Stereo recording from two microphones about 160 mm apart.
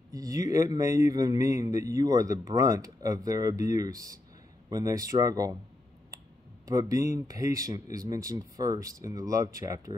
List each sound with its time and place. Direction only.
0.1 s a man's voice: 20° right (ahead or behind)
6.7 s a man's voice: 20° right (ahead or behind)